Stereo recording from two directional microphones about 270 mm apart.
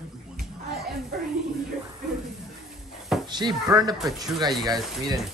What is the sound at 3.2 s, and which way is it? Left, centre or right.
Speech, centre.